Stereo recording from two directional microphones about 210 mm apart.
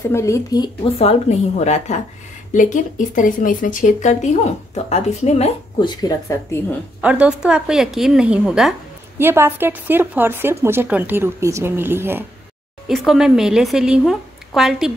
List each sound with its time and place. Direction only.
0.1 s speech: 15° left (ahead or behind)
0.9 s speech: 30° left (ahead or behind)
7.0 s a woman's voice: 5° right (ahead or behind)